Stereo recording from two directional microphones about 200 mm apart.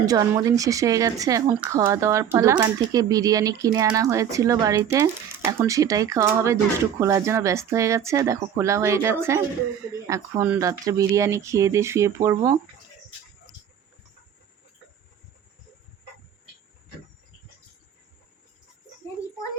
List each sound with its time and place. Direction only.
0.0 s speech: 15° right (ahead or behind)